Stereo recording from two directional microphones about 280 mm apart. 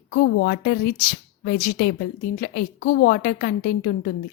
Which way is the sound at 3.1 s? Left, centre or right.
Left.